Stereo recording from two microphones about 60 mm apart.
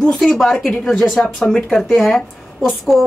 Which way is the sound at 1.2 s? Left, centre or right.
Centre.